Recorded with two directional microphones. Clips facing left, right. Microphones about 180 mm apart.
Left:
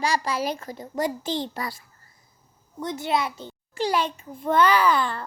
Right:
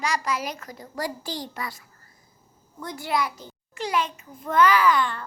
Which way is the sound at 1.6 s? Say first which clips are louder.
Left 2 dB; 35° left (ahead or behind).